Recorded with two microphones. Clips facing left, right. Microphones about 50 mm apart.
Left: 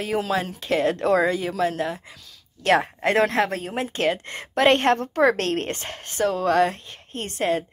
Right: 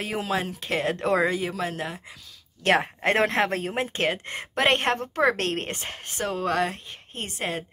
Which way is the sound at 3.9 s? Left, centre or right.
Right.